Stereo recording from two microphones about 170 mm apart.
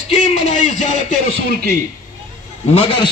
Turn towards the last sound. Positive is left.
turn(degrees=30)  # may be behind; listen again after turning